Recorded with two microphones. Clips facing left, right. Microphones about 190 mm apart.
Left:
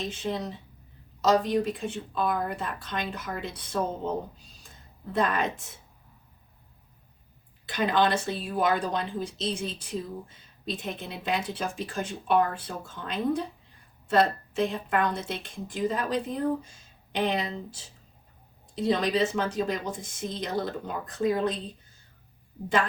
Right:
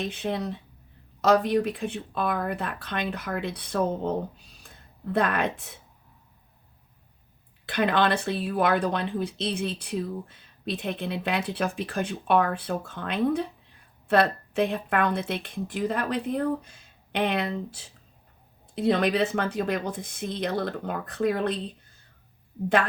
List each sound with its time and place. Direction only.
0.0 s speech: 60° right (ahead or behind)
5.1 s speech: 60° right (ahead or behind)
7.7 s speech: 60° right (ahead or behind)